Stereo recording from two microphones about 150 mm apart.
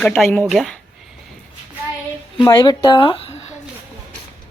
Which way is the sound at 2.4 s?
25° left (ahead or behind).